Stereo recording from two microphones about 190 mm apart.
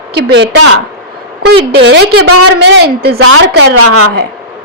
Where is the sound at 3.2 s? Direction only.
90° right.